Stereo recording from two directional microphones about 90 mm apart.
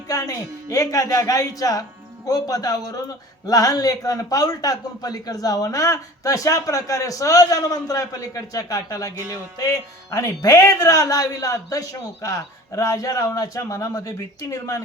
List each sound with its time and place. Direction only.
0.1 s a man's voice: 40° left (ahead or behind)